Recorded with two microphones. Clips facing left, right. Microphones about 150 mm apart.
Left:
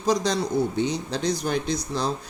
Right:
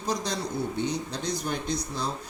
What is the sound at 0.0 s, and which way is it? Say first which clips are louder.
Speech: left 7 dB; 90° left.